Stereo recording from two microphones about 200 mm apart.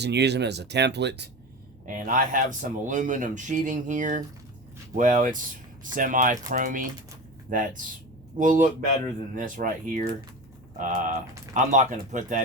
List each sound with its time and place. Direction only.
0.0 s speech: 55° right (ahead or behind)
1.9 s speech: 40° right (ahead or behind)